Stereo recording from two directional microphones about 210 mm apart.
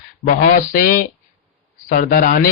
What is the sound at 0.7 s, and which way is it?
Speech, 40° left (ahead or behind).